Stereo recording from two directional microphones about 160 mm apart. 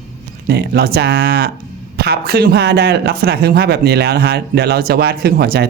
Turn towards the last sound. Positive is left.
turn(degrees=-80)